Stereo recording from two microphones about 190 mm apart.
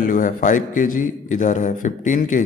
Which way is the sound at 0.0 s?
45° left (ahead or behind).